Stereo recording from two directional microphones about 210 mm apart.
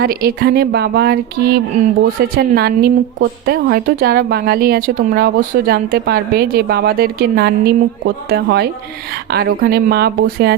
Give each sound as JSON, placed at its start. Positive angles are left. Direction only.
{"t": 0.0, "sound": "a woman's voice", "side_deg": -45}